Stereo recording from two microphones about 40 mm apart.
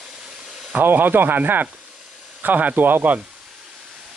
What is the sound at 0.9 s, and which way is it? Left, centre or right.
Speech, right.